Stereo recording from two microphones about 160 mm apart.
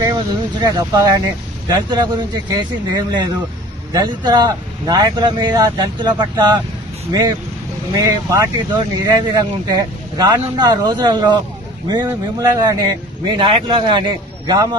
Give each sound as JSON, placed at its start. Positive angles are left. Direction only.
{"t": 0.6, "sound": "speech", "side_deg": -25}